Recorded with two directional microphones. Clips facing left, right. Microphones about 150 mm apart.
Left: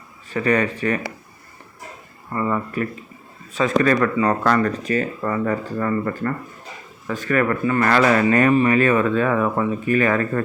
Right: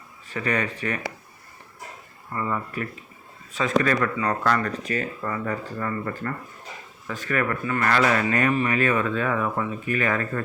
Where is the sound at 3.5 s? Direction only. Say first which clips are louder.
Left 4 dB; 40° left (ahead or behind).